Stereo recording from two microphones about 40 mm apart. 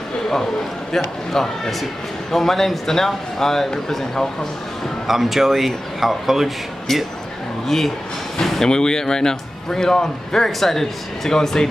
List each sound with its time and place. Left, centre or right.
0.9 s a man's voice: centre
5.0 s speech: centre
6.9 s a man's voice: centre